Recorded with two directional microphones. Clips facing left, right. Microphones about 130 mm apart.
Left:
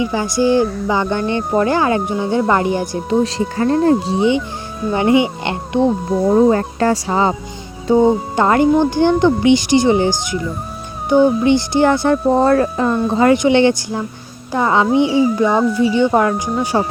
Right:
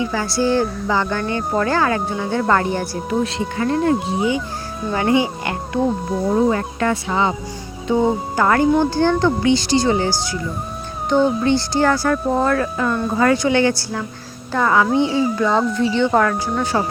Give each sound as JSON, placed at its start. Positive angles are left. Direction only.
{"t": 0.0, "sound": "speech", "side_deg": 15}
{"t": 3.2, "sound": "speech", "side_deg": 35}
{"t": 6.3, "sound": "speech", "side_deg": 40}
{"t": 8.4, "sound": "speech", "side_deg": 25}
{"t": 13.1, "sound": "speech", "side_deg": 20}